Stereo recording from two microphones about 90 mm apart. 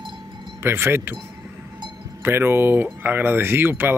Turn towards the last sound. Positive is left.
turn(degrees=-25)  # may be behind; listen again after turning